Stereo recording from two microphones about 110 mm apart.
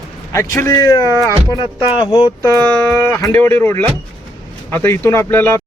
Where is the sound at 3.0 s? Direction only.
25° left (ahead or behind).